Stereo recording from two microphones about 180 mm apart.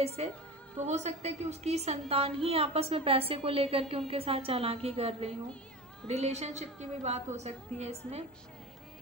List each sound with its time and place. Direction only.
0.2 s a woman's voice: 35° right (ahead or behind)